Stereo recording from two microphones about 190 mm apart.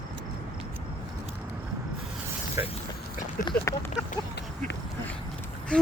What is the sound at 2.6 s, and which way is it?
Speech, 15° right (ahead or behind).